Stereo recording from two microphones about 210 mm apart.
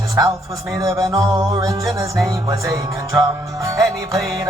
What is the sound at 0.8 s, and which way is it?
Music, 15° right (ahead or behind).